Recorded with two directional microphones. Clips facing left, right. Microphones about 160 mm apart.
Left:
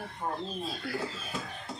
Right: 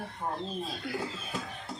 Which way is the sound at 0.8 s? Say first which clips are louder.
Left 1 dB; 15° right (ahead or behind).